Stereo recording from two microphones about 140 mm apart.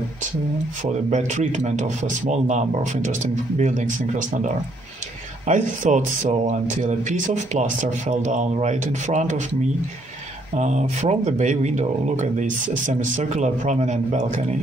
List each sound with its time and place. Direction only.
1.1 s speech: 60° right (ahead or behind)
5.5 s speech: 60° right (ahead or behind)
10.5 s speech: 55° right (ahead or behind)